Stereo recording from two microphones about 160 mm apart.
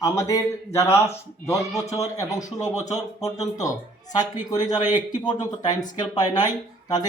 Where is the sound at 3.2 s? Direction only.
20° left (ahead or behind).